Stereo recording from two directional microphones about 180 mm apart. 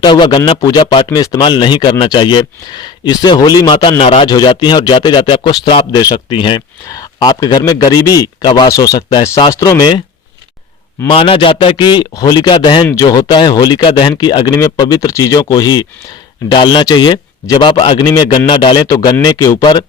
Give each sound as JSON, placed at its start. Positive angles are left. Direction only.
{"t": 0.0, "sound": "speech", "side_deg": 25}
{"t": 11.1, "sound": "speech", "side_deg": 30}